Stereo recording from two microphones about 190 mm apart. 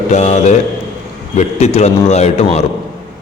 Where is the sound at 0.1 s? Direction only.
40° left (ahead or behind).